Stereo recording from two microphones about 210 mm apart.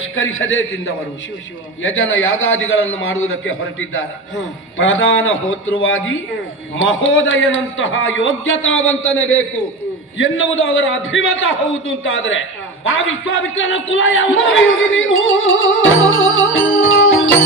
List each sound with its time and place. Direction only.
0.2 s a man's voice: 70° left (ahead or behind)
2.0 s a man's voice: 70° left (ahead or behind)
10.2 s a man's voice: 70° left (ahead or behind)